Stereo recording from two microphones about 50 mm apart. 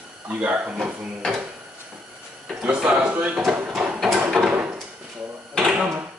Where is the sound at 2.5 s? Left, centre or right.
Right.